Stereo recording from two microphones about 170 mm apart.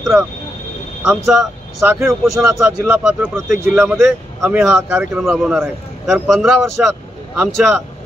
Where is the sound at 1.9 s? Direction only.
15° right (ahead or behind).